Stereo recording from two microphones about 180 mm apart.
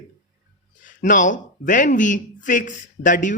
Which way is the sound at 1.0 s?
45° left (ahead or behind).